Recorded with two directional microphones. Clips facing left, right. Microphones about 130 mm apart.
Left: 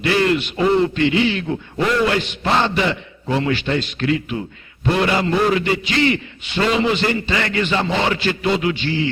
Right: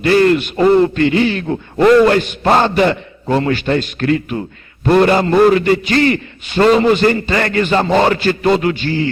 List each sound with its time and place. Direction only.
0.0 s a man's voice: 45° right (ahead or behind)